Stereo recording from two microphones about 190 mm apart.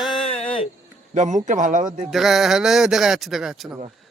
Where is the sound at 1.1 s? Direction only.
40° right (ahead or behind).